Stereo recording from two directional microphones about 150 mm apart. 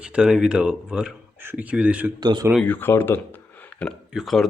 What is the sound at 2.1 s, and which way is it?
Speech, 30° right (ahead or behind).